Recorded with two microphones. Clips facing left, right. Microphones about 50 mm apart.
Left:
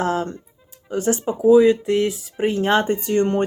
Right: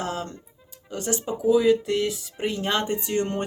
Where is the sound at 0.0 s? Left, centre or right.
Left.